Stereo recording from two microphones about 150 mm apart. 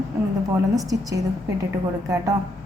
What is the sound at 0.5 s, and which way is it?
A woman's voice, 25° right (ahead or behind).